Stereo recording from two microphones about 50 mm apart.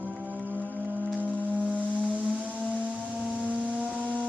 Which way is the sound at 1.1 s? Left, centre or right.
Right.